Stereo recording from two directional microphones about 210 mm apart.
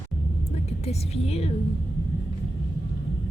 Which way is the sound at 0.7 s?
30° left (ahead or behind).